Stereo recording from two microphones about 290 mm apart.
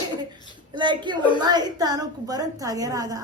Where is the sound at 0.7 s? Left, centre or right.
Centre.